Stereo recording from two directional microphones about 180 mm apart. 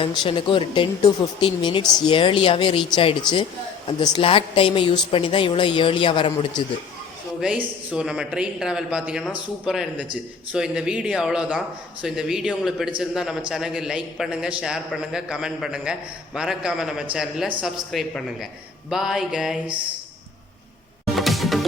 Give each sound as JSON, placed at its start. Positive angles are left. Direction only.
{"t": 0.3, "sound": "speech", "side_deg": 30}
{"t": 7.4, "sound": "a man's voice", "side_deg": -5}
{"t": 21.1, "sound": "music", "side_deg": 0}